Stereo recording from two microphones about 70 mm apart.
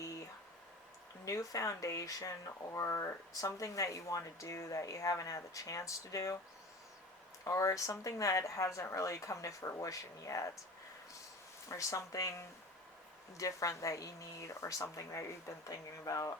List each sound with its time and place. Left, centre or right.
1.2 s speech: left
7.4 s speech: left
11.7 s speech: left